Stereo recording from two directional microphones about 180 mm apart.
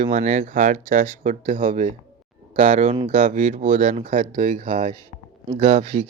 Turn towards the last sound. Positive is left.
turn(degrees=-35)  # may be behind; listen again after turning